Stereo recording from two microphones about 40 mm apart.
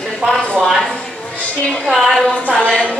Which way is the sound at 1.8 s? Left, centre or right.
Centre.